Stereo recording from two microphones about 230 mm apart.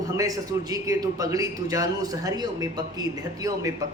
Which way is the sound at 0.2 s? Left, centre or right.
Centre.